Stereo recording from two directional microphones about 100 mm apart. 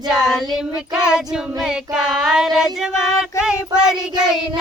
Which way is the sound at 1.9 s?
5° right (ahead or behind).